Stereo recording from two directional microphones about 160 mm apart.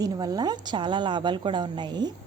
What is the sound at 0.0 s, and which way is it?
A woman's voice, 25° right (ahead or behind).